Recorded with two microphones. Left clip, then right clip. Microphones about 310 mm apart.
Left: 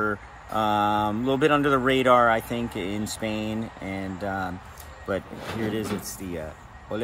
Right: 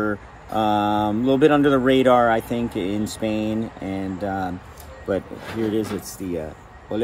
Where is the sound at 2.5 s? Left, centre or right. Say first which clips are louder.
Right 5 dB; left.